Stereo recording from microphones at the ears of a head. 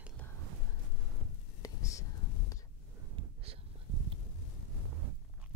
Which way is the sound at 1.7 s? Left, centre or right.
Left.